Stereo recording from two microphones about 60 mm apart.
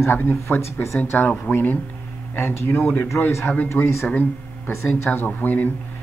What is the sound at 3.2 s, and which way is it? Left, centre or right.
Speech, centre.